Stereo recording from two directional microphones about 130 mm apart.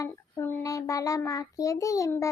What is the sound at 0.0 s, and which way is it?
Child singing, 20° left (ahead or behind).